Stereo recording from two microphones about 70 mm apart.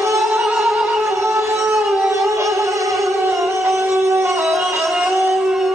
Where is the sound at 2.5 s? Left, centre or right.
Right.